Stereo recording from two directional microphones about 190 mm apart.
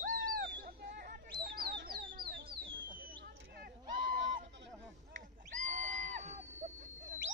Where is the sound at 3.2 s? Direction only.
55° right (ahead or behind).